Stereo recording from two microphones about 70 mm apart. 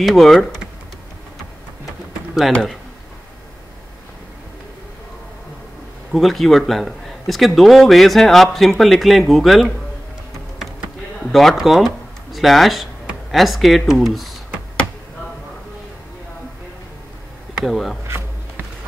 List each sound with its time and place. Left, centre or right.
0.0 s speech: centre
2.5 s speech: centre
6.1 s speech: centre
11.2 s speech: centre
17.6 s speech: centre
18.0 s music: right